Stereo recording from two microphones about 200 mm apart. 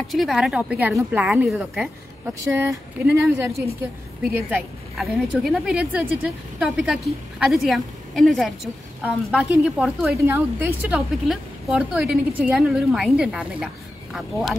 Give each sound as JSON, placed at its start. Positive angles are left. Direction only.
{"t": 0.1, "sound": "a woman's voice", "side_deg": 0}